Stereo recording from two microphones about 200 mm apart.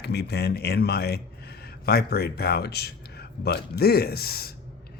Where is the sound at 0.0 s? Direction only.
55° left (ahead or behind).